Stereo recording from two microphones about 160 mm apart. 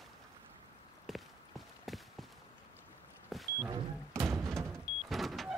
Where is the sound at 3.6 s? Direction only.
20° right (ahead or behind).